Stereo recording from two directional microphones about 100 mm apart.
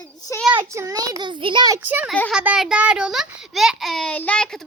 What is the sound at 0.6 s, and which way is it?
Speech, 25° right (ahead or behind).